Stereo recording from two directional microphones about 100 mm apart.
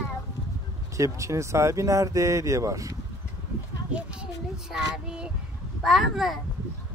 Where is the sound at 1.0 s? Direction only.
30° right (ahead or behind).